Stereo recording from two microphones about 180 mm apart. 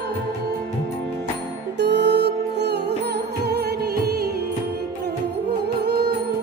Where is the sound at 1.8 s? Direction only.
70° right (ahead or behind).